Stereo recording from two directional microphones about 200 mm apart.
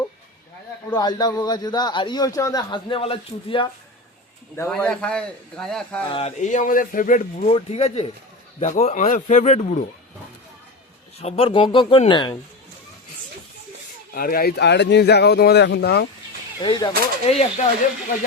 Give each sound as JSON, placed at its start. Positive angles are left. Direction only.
{"t": 0.9, "sound": "a man's voice", "side_deg": 20}
{"t": 4.7, "sound": "speech", "side_deg": 5}
{"t": 6.1, "sound": "a man's voice", "side_deg": 30}
{"t": 7.4, "sound": "a man's voice", "side_deg": 30}
{"t": 11.2, "sound": "a man's voice", "side_deg": 30}
{"t": 14.1, "sound": "speech", "side_deg": 45}
{"t": 16.6, "sound": "a man's voice", "side_deg": 25}